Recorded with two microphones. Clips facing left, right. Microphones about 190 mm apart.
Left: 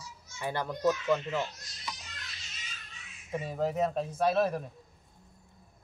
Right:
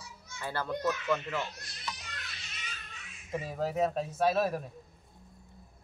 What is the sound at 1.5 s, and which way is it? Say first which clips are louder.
Speech: right 4 dB; 60° right (ahead or behind).